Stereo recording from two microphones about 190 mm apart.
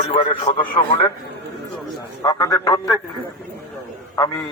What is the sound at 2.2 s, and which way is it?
Speech, 20° left (ahead or behind).